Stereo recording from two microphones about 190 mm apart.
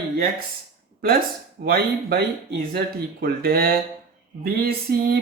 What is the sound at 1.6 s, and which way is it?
Speech, 55° right (ahead or behind).